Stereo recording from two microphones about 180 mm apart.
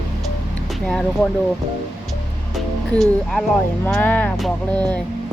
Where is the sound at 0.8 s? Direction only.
5° left (ahead or behind).